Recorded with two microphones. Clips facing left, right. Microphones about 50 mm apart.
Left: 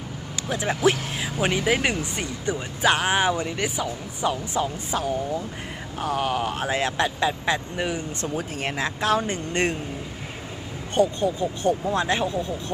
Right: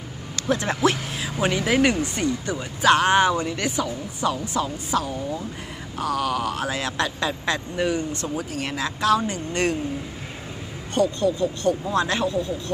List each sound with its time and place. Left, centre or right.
0.5 s speech: centre
8.1 s speech: left
10.9 s speech: left